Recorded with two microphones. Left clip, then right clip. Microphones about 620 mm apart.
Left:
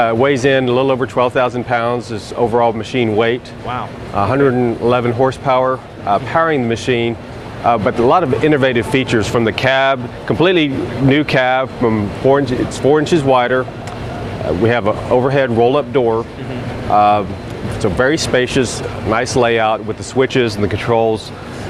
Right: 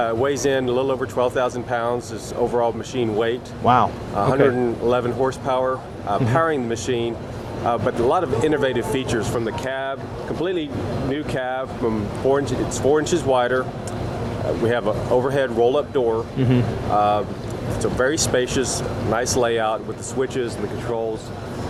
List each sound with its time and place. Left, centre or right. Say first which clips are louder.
0.0 s speech: left 7 dB; left
3.7 s speech: right 7 dB; right
4.2 s speech: left 4 dB; left
14.7 s speech: left 5 dB; left